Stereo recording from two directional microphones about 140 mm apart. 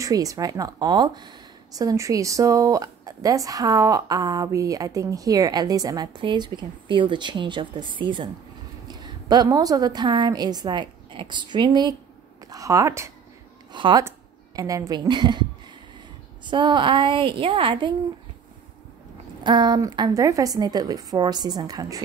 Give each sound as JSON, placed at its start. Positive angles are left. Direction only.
{"t": 0.0, "sound": "a woman's voice", "side_deg": -25}
{"t": 13.7, "sound": "a woman's voice", "side_deg": -35}
{"t": 16.4, "sound": "a woman's voice", "side_deg": -35}
{"t": 19.4, "sound": "speech", "side_deg": -35}